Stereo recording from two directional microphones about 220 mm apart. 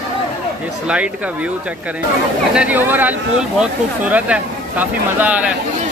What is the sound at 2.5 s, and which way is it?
Speech, 5° right (ahead or behind).